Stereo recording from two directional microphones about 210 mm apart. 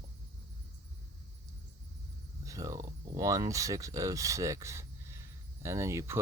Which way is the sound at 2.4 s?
15° right (ahead or behind).